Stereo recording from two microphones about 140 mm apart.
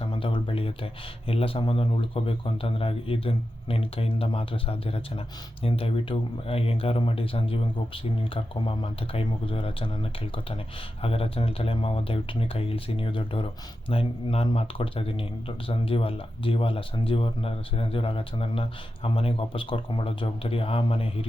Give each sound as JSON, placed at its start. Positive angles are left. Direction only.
{"t": 0.0, "sound": "speech", "side_deg": 35}